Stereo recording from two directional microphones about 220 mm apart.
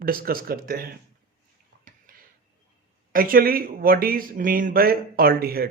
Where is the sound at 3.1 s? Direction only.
40° right (ahead or behind).